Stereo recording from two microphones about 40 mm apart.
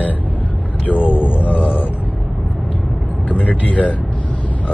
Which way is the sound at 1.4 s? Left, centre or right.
Right.